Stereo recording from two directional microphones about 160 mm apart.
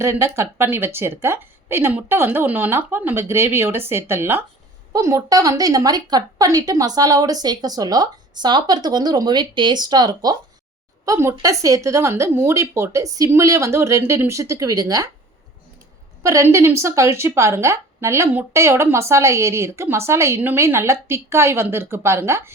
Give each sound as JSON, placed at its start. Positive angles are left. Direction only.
{"t": 0.0, "sound": "a woman's voice", "side_deg": -15}
{"t": 16.2, "sound": "a woman's voice", "side_deg": -20}